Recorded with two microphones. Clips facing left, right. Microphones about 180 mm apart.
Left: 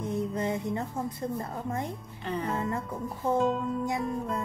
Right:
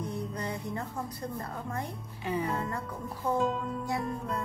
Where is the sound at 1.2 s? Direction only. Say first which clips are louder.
Left 4 dB; 20° left (ahead or behind).